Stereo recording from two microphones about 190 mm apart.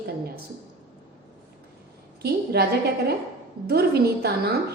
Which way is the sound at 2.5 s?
60° right (ahead or behind).